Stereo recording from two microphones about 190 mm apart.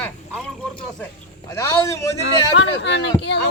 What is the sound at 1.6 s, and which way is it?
Speech, 15° left (ahead or behind).